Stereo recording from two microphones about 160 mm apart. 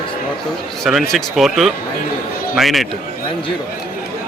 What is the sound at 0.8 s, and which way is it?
A man's voice, centre (ahead or behind).